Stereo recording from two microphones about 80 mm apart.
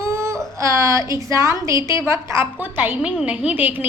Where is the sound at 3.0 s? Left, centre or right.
Centre.